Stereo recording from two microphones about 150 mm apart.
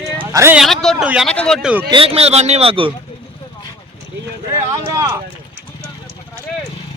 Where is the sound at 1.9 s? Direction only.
40° right (ahead or behind).